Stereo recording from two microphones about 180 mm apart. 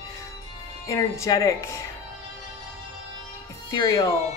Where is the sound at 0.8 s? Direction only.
15° left (ahead or behind).